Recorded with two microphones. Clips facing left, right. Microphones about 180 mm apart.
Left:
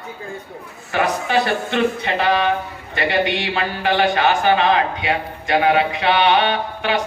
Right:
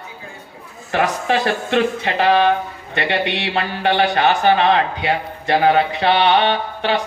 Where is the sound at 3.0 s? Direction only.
Centre (ahead or behind).